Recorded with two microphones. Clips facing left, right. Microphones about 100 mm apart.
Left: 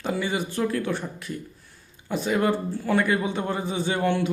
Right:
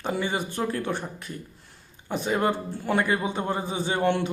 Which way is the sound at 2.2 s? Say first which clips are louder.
Left 2 dB; 25° right (ahead or behind).